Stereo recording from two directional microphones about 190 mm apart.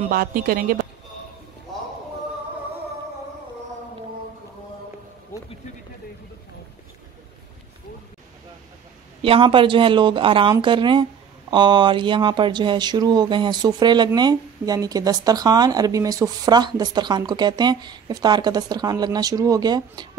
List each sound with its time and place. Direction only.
0.1 s a woman's voice: 50° right (ahead or behind)
9.2 s speech: 30° right (ahead or behind)